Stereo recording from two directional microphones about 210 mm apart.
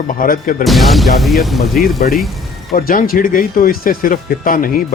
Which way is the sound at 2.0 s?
40° left (ahead or behind).